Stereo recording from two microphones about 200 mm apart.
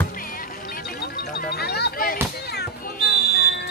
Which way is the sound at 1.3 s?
55° left (ahead or behind).